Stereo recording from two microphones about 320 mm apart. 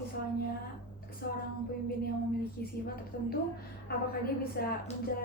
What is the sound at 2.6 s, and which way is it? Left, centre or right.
Speech, left.